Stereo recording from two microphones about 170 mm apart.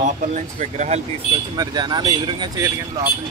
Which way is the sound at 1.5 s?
25° right (ahead or behind).